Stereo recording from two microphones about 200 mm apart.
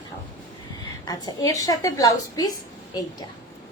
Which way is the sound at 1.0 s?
20° left (ahead or behind).